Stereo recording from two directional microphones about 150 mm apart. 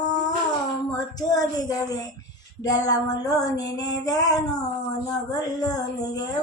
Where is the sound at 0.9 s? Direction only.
25° left (ahead or behind).